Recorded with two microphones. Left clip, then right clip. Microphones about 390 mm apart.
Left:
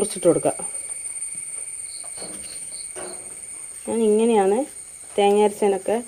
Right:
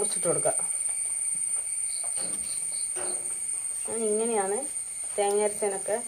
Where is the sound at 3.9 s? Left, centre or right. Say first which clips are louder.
Left 9 dB; left.